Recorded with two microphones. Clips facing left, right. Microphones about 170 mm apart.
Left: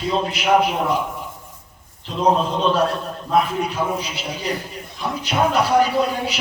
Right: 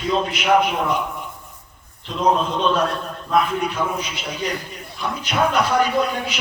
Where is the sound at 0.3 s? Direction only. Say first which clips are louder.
Left 1 dB; 30° left (ahead or behind).